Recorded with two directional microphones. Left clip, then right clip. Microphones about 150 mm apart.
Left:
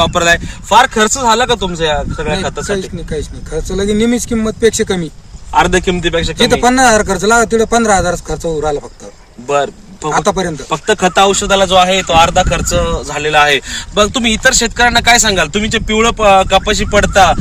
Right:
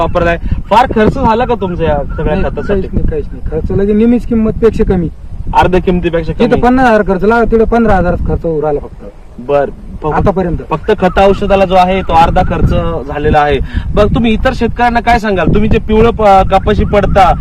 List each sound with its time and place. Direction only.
0.0 s speech: 30° left (ahead or behind)
2.7 s speech: 5° left (ahead or behind)
5.5 s speech: 30° left (ahead or behind)
6.2 s speech: 10° left (ahead or behind)
9.5 s speech: 25° left (ahead or behind)
10.2 s a man's voice: 5° left (ahead or behind)
10.7 s speech: 25° left (ahead or behind)